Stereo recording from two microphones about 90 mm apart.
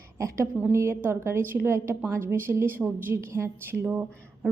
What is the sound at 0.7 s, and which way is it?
A woman's voice, 30° right (ahead or behind).